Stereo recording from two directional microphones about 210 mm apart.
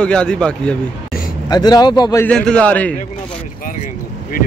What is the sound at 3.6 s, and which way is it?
Vehicle, 40° left (ahead or behind).